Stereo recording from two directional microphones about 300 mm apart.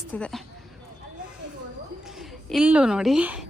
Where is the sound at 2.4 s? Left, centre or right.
Centre.